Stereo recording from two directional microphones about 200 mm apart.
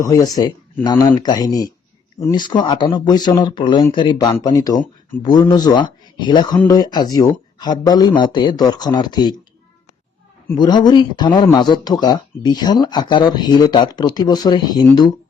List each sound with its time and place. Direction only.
0.0 s speech: 20° left (ahead or behind)
10.5 s speech: 20° left (ahead or behind)